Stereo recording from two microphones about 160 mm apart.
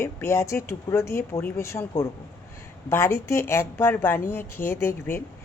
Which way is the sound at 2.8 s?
15° left (ahead or behind).